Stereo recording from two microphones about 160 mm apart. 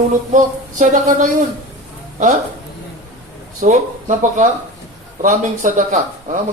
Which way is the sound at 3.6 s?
50° right (ahead or behind).